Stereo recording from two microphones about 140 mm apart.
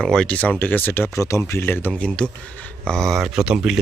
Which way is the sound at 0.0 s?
5° left (ahead or behind).